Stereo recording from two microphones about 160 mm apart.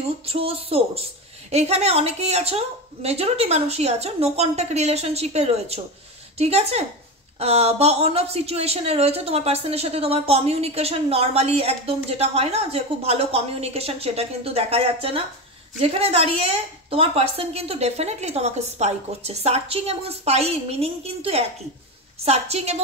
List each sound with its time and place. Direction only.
0.2 s speech: 35° right (ahead or behind)